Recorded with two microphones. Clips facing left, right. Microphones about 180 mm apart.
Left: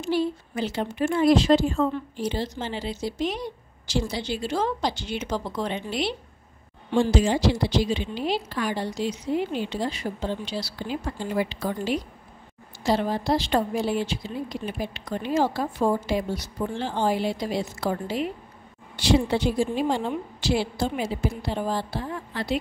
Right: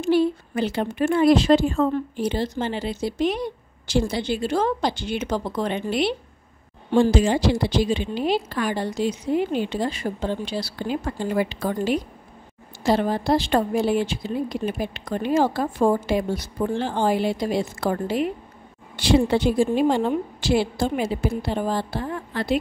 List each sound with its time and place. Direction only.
0.0 s a woman's voice: 60° right (ahead or behind)